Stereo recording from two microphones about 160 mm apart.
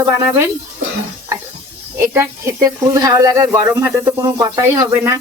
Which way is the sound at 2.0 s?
20° right (ahead or behind).